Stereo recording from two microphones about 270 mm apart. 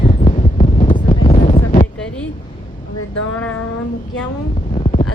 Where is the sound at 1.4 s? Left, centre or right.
Left.